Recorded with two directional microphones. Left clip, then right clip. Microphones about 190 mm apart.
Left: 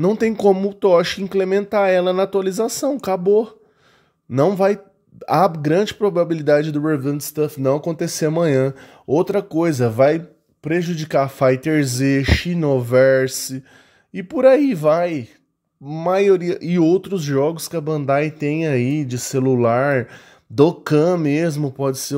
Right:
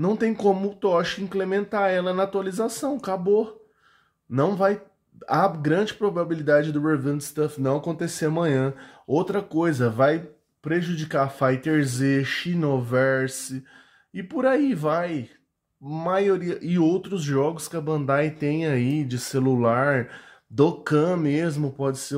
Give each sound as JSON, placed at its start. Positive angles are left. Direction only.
{"t": 0.0, "sound": "speech", "side_deg": 35}